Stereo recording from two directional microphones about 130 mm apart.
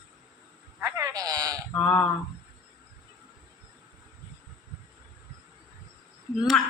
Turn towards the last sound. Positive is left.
turn(degrees=5)  # may be behind; listen again after turning